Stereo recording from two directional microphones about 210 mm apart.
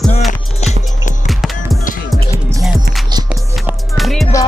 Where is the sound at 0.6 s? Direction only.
30° left (ahead or behind).